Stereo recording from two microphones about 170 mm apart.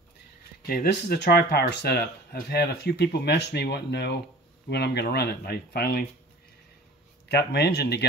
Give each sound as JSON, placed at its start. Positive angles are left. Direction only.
{"t": 0.7, "sound": "speech", "side_deg": 60}
{"t": 7.2, "sound": "speech", "side_deg": 75}